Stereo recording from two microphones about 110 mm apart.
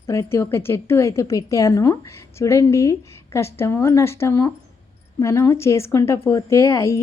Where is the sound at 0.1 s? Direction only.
25° left (ahead or behind).